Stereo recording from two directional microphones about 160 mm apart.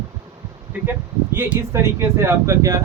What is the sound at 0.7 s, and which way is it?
Speech, 10° right (ahead or behind).